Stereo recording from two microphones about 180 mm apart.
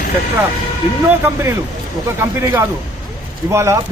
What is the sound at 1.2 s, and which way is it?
A man's voice, 15° right (ahead or behind).